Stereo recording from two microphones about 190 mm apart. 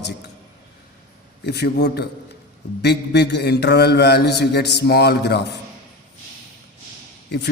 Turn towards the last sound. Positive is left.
turn(degrees=60)  # may be behind; listen again after turning